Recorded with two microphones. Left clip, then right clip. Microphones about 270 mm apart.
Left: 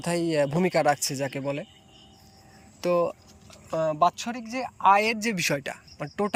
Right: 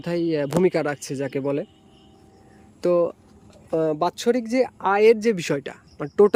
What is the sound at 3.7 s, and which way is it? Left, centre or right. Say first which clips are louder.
Speech: right 1 dB; right.